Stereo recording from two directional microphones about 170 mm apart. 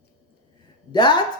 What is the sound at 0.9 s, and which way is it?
Speech, 25° left (ahead or behind).